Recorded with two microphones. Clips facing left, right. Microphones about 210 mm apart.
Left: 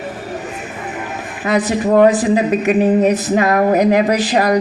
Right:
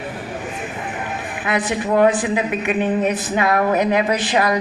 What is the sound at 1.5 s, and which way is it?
A woman's voice, 40° left (ahead or behind).